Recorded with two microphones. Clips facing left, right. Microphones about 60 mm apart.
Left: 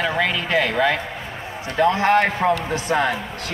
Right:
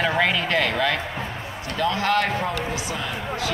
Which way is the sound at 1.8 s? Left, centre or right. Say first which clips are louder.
Left 5 dB; left.